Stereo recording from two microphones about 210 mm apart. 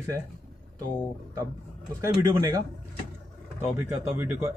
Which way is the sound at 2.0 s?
15° right (ahead or behind).